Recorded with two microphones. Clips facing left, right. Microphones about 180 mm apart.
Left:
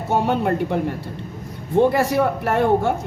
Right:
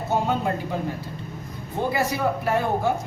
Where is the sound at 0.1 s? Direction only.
70° left (ahead or behind).